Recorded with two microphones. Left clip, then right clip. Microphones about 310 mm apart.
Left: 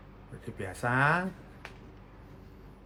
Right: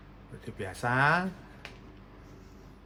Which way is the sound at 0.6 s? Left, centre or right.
Centre.